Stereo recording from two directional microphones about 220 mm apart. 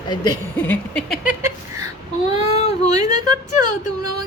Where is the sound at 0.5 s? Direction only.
5° left (ahead or behind).